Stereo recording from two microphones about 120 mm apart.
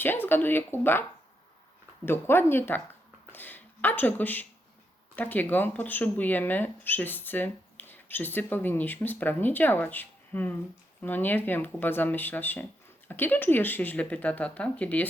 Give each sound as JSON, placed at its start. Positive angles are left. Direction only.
{"t": 0.0, "sound": "speech", "side_deg": 15}
{"t": 2.0, "sound": "speech", "side_deg": 20}